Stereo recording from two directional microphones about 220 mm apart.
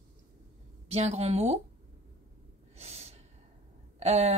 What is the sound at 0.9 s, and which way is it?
Speech, 30° right (ahead or behind).